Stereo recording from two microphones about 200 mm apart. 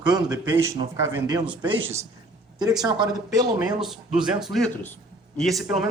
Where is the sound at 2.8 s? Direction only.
20° right (ahead or behind).